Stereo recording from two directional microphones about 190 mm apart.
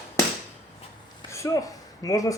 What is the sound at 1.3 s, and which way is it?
Speech, 15° left (ahead or behind).